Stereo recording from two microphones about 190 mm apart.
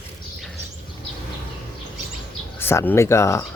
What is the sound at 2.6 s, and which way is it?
Speech, 10° left (ahead or behind).